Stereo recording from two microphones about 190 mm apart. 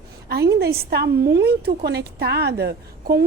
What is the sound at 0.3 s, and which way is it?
A woman's voice, 55° right (ahead or behind).